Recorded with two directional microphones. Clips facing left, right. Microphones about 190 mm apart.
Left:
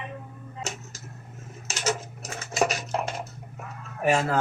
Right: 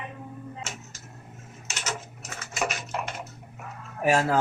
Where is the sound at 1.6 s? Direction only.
35° left (ahead or behind).